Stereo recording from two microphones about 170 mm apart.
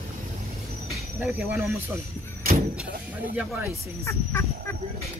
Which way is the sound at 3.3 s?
10° right (ahead or behind).